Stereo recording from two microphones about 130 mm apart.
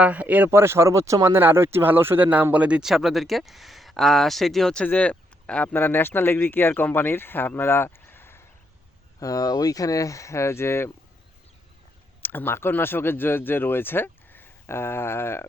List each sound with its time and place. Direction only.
0.0 s speech: 10° right (ahead or behind); by 8.4 s 20° left (ahead or behind)
9.2 s speech: 30° left (ahead or behind)
12.2 s speech: 15° left (ahead or behind)